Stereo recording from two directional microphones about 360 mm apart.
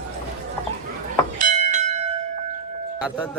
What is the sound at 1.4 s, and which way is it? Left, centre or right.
Bell, centre.